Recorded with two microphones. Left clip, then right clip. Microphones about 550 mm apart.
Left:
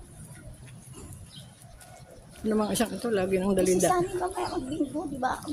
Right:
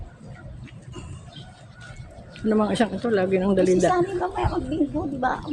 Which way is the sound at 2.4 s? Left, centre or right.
Left.